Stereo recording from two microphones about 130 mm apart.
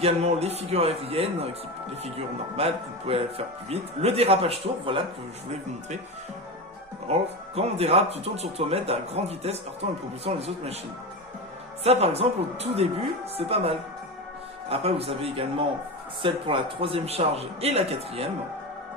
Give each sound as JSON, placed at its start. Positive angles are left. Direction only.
{"t": 0.0, "sound": "speech", "side_deg": -55}
{"t": 2.6, "sound": "speech", "side_deg": -50}
{"t": 7.1, "sound": "speech", "side_deg": -50}
{"t": 11.8, "sound": "speech", "side_deg": -50}